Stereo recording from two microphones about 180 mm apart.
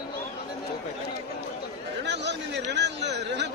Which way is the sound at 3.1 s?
70° right (ahead or behind).